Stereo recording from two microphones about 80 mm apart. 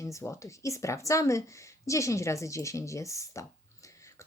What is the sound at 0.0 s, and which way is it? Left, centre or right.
Speech, left.